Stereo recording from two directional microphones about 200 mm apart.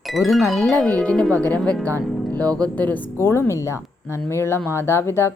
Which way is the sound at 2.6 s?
10° left (ahead or behind).